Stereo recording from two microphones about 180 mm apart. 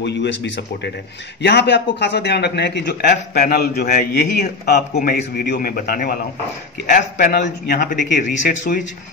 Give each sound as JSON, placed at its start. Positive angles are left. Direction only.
{"t": 0.0, "sound": "a man's voice", "side_deg": 75}
{"t": 7.4, "sound": "speech", "side_deg": 60}